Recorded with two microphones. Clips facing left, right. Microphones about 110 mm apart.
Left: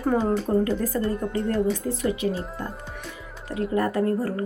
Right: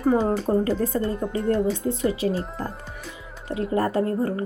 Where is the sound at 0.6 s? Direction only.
30° right (ahead or behind).